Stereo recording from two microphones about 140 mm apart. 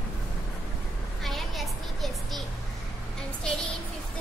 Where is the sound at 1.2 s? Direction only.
Centre (ahead or behind).